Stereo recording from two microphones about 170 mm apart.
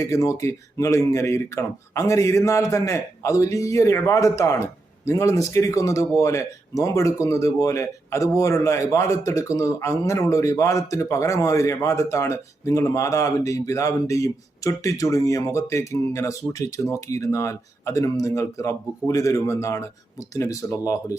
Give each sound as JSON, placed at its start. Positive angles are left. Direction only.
{"t": 0.0, "sound": "speech", "side_deg": 20}